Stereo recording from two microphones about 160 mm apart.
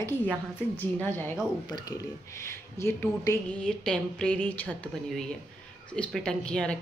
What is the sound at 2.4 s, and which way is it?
Speech, 15° left (ahead or behind).